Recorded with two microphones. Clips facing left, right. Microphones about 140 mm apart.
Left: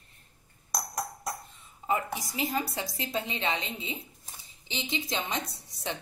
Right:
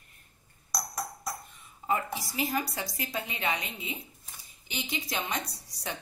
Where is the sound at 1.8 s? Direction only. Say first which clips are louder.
Left 1 dB; 20° left (ahead or behind).